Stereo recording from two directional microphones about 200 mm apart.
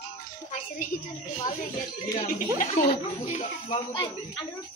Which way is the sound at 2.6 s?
35° left (ahead or behind).